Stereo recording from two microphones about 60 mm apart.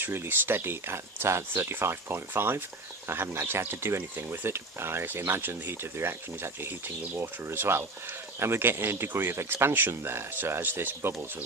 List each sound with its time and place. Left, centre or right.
0.0 s speech: right